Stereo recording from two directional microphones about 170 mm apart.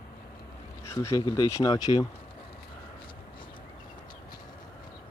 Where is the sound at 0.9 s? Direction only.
20° left (ahead or behind).